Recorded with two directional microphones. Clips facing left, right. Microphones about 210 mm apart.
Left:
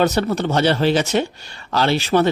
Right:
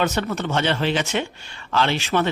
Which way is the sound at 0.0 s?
35° left (ahead or behind).